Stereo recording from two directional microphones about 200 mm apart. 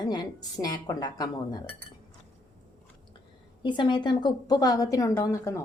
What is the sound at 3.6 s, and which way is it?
Speech, 25° left (ahead or behind).